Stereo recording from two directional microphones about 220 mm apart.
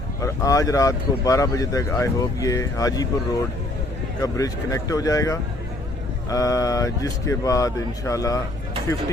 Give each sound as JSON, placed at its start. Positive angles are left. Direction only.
{"t": 0.2, "sound": "speech", "side_deg": 15}
{"t": 4.2, "sound": "speech", "side_deg": 15}